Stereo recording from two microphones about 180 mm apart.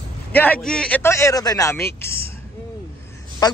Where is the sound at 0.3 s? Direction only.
10° left (ahead or behind).